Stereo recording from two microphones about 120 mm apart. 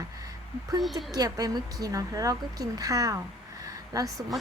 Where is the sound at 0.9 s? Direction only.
30° right (ahead or behind).